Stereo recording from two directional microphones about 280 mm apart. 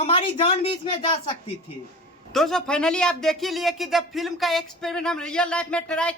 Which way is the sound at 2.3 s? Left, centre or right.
Centre.